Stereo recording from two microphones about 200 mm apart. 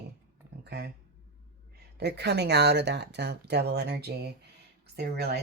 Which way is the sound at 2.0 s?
55° right (ahead or behind).